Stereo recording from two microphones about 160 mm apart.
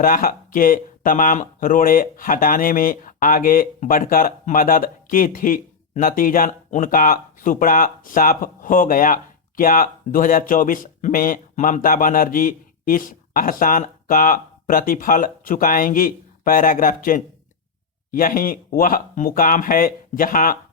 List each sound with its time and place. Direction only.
0.0 s speech: 60° left (ahead or behind)